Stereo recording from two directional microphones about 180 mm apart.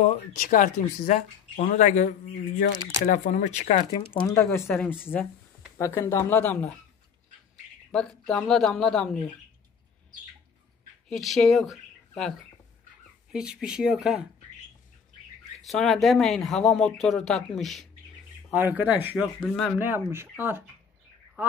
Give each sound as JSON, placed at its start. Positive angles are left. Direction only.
{"t": 0.0, "sound": "speech", "side_deg": 40}
{"t": 4.2, "sound": "speech", "side_deg": 15}
{"t": 7.9, "sound": "speech", "side_deg": 5}
{"t": 11.1, "sound": "speech", "side_deg": 0}
{"t": 13.3, "sound": "speech", "side_deg": -5}
{"t": 15.6, "sound": "speech", "side_deg": 0}
{"t": 18.5, "sound": "speech", "side_deg": -10}
{"t": 19.4, "sound": "speech", "side_deg": 5}
{"t": 19.8, "sound": "speech", "side_deg": -10}